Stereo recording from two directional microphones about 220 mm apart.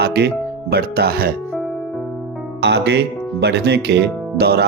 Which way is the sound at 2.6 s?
50° right (ahead or behind).